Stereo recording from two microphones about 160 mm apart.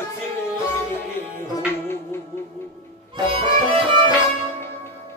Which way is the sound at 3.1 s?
35° right (ahead or behind).